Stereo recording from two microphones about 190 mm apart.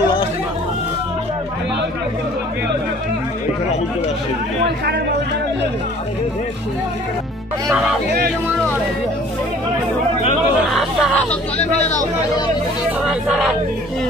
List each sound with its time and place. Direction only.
7.7 s speech: centre (ahead or behind)
10.7 s hubbub: centre (ahead or behind)
11.5 s speech: 35° left (ahead or behind)
13.0 s speech: 5° right (ahead or behind)